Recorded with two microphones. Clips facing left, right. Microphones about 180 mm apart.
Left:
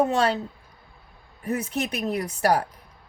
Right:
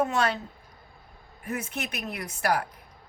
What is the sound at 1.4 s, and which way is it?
Speech, 35° left (ahead or behind).